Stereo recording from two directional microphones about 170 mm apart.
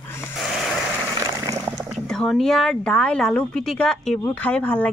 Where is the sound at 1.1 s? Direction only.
20° right (ahead or behind).